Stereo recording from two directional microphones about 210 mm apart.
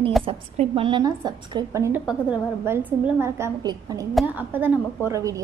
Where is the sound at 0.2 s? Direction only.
25° right (ahead or behind).